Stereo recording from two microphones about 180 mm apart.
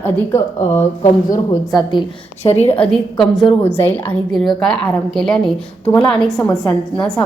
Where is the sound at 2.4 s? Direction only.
35° left (ahead or behind).